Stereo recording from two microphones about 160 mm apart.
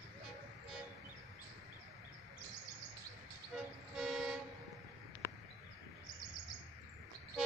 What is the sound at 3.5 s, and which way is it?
Vehicle, centre (ahead or behind).